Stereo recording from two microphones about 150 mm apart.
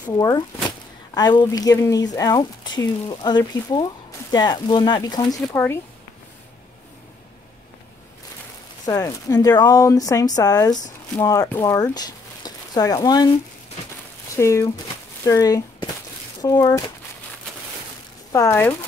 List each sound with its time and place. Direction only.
0.0 s speech: 25° left (ahead or behind)
8.8 s speech: 25° left (ahead or behind)
14.3 s speech: 20° left (ahead or behind)
18.3 s speech: 15° left (ahead or behind)